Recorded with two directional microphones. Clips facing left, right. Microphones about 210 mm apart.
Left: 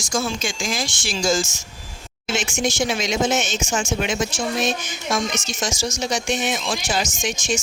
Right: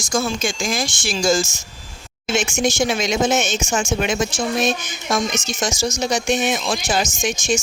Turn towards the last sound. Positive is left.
turn(degrees=-45)  # may be behind; listen again after turning